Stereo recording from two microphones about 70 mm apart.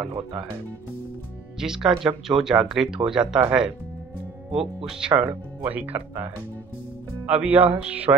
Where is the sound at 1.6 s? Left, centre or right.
Centre.